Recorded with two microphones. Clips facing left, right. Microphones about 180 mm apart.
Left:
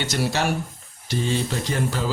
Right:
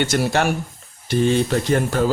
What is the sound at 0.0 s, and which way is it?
Speech, 55° right (ahead or behind).